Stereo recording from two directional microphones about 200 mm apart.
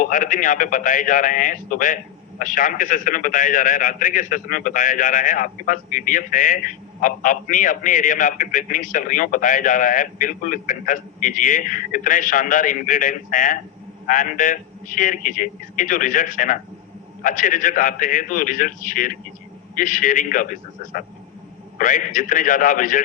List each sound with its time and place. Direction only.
0.0 s a man's voice: 40° left (ahead or behind)